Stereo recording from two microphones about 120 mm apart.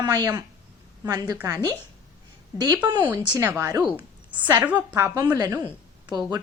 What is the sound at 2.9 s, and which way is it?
Speech, 35° right (ahead or behind).